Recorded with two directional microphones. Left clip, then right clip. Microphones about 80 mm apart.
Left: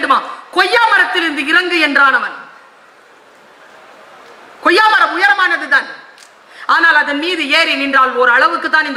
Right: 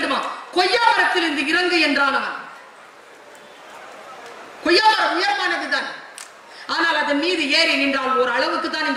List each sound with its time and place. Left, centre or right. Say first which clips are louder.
0.0 s a man's voice: left 9 dB; left
4.6 s a man's voice: left 6 dB; left